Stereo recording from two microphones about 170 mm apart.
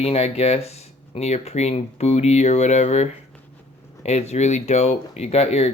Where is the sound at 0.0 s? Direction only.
40° left (ahead or behind).